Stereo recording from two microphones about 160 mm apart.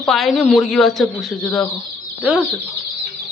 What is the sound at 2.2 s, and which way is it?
Speech, 5° right (ahead or behind).